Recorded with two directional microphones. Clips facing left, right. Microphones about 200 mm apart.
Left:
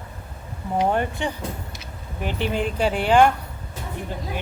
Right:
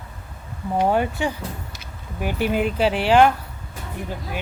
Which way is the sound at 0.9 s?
5° right (ahead or behind).